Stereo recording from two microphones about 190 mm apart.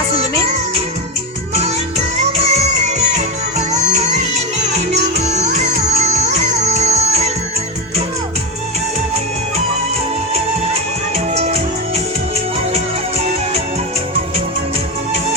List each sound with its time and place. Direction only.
2.2 s music: 35° right (ahead or behind)
11.3 s music: 35° right (ahead or behind)